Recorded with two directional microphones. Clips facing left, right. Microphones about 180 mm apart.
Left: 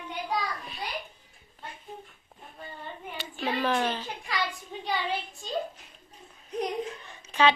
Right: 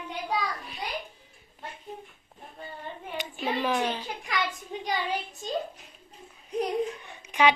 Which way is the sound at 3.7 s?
10° right (ahead or behind).